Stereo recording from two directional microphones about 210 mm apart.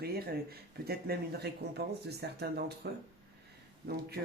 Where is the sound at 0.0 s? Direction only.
50° right (ahead or behind).